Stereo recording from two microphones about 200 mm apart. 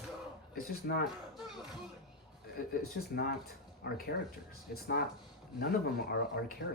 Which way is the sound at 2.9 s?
50° left (ahead or behind).